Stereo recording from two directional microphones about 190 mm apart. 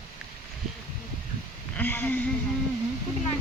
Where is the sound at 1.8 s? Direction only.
10° left (ahead or behind).